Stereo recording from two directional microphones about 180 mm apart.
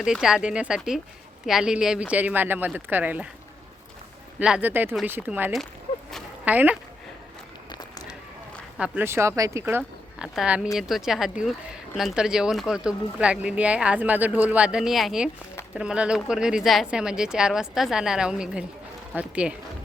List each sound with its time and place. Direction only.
0.0 s speech: 5° right (ahead or behind)
4.4 s speech: 5° right (ahead or behind)
6.1 s a sound: centre (ahead or behind)
6.5 s speech: 10° right (ahead or behind)
7.7 s a sound: 20° left (ahead or behind)
8.8 s speech: 10° right (ahead or behind)